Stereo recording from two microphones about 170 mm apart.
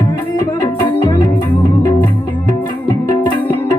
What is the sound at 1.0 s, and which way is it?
Music, 25° left (ahead or behind).